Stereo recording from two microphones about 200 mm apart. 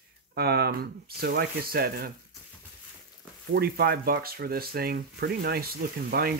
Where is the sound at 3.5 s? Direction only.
50° right (ahead or behind).